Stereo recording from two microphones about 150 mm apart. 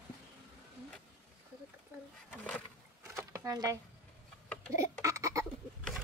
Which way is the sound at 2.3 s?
10° left (ahead or behind).